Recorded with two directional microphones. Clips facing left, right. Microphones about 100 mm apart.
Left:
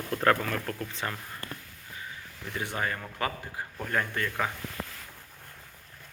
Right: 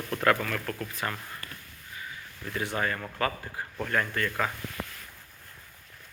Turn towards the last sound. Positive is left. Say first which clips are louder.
# right 1 dB
turn(degrees=15)  # may be behind; listen again after turning